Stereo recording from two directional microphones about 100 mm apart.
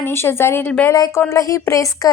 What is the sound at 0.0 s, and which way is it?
A woman's voice, 25° left (ahead or behind).